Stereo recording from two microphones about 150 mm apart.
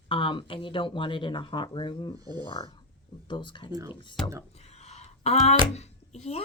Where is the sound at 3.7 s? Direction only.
20° right (ahead or behind).